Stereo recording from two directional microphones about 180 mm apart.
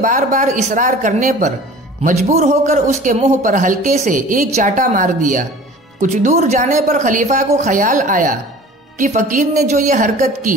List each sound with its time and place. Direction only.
0.0 s speech: 45° right (ahead or behind)